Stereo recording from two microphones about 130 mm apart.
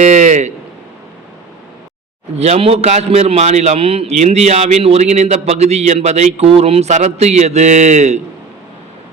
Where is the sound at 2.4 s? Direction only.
50° right (ahead or behind).